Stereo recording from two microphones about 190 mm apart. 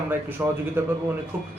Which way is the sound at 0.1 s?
10° right (ahead or behind).